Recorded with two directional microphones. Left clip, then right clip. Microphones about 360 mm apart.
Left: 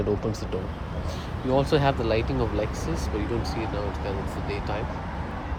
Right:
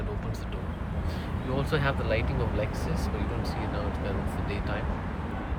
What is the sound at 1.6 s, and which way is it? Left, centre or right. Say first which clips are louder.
Speech: left 6 dB; centre.